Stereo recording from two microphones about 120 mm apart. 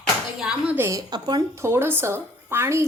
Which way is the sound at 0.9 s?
30° right (ahead or behind).